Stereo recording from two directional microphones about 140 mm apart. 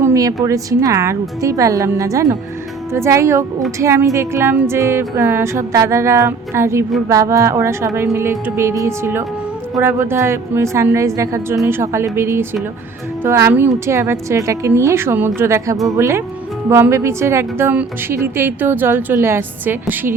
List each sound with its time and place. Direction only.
0.0 s a sound: 25° right (ahead or behind)
0.4 s music: 25° right (ahead or behind)
13.2 s a woman's voice: 20° right (ahead or behind)
13.7 s music: 20° right (ahead or behind)
16.6 s a woman's voice: 20° right (ahead or behind)